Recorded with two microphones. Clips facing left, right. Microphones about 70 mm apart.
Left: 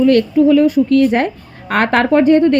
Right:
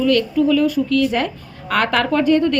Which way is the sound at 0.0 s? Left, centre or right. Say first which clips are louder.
Left 5 dB; left.